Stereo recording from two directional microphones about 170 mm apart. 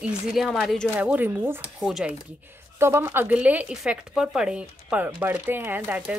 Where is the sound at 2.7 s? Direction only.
15° right (ahead or behind).